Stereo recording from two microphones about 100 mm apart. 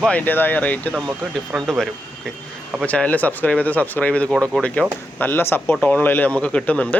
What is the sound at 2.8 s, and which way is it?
Speech, 15° left (ahead or behind).